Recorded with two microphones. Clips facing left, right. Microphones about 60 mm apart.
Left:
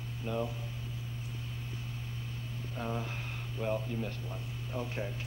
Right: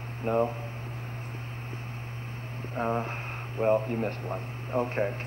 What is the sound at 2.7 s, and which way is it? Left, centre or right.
A man's voice, right.